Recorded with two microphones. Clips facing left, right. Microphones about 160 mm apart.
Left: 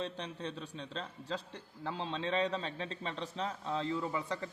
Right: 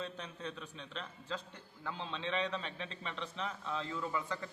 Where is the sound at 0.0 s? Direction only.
30° left (ahead or behind).